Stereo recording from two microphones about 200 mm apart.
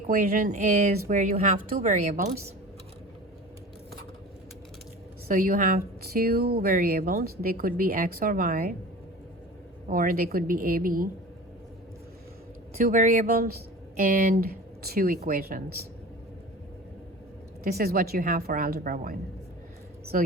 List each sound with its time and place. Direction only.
0.1 s speech: 45° right (ahead or behind)
5.3 s speech: 45° right (ahead or behind)
9.9 s speech: 45° right (ahead or behind)
12.8 s speech: 40° right (ahead or behind)
17.6 s speech: 50° right (ahead or behind)
20.1 s speech: 40° right (ahead or behind)